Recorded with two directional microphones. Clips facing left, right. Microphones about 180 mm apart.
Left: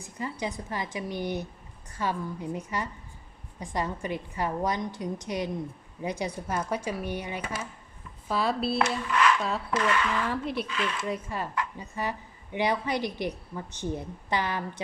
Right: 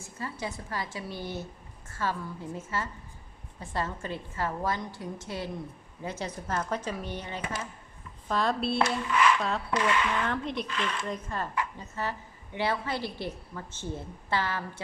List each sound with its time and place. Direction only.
0.0 s a woman's voice: 15° left (ahead or behind)